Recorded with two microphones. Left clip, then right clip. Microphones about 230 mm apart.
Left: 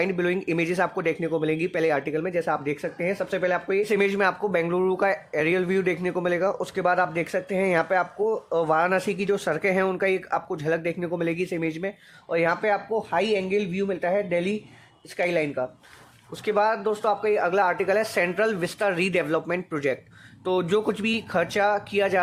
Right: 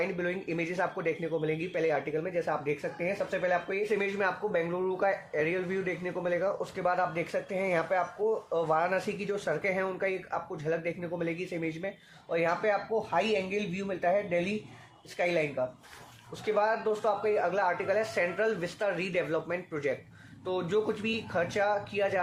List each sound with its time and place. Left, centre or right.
0.0 s speech: left